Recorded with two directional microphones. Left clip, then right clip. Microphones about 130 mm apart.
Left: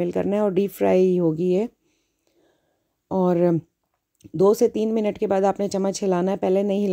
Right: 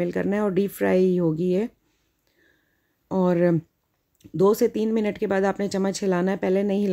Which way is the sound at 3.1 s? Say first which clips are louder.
Left 1 dB; 35° left (ahead or behind).